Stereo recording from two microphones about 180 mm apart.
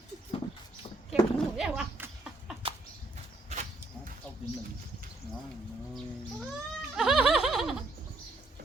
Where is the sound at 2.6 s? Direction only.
30° right (ahead or behind).